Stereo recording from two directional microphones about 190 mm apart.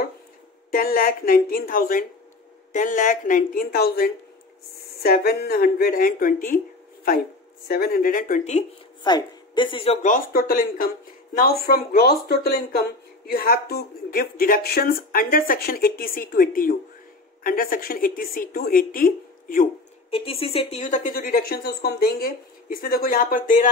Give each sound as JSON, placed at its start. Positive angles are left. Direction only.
{"t": 0.7, "sound": "a woman's voice", "side_deg": 50}
{"t": 7.6, "sound": "a woman's voice", "side_deg": 50}
{"t": 9.0, "sound": "speech", "side_deg": 25}
{"t": 10.0, "sound": "a woman's voice", "side_deg": 45}
{"t": 20.1, "sound": "a woman's voice", "side_deg": 30}